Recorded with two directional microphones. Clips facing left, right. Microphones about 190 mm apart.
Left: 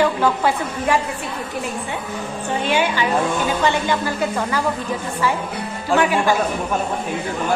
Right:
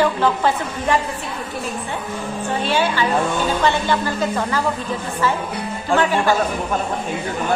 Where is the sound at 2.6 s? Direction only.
15° left (ahead or behind).